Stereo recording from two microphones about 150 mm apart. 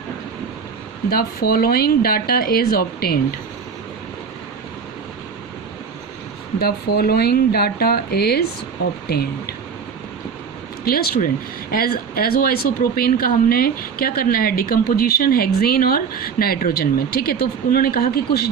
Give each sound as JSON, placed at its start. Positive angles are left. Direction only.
{"t": 1.1, "sound": "speech", "side_deg": 85}
{"t": 6.6, "sound": "speech", "side_deg": 90}
{"t": 10.8, "sound": "speech", "side_deg": 85}